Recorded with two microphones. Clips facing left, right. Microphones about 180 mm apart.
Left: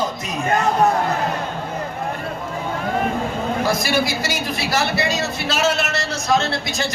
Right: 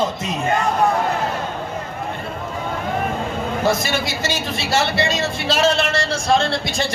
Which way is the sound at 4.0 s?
25° right (ahead or behind).